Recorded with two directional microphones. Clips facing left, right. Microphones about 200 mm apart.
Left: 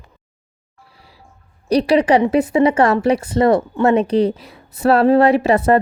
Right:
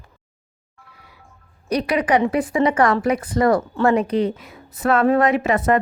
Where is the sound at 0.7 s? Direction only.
30° left (ahead or behind).